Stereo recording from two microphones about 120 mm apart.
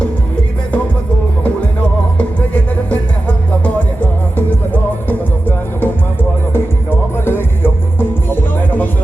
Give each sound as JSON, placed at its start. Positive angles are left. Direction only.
{"t": 1.5, "sound": "music", "side_deg": 10}
{"t": 7.3, "sound": "music", "side_deg": 20}